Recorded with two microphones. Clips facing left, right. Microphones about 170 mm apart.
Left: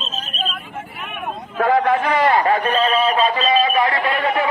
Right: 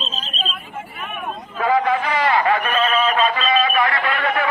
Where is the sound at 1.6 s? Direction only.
55° left (ahead or behind).